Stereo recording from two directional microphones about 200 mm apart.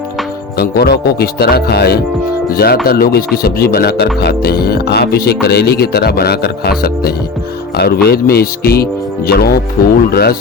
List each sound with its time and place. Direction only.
0.6 s speech: 50° left (ahead or behind)